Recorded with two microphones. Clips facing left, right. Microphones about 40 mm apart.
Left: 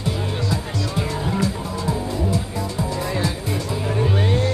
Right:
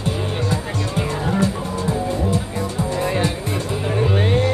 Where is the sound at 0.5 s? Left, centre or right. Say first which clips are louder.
Right 2 dB; right.